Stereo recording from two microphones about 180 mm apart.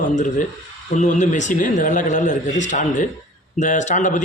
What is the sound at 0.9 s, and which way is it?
Speech, 40° left (ahead or behind).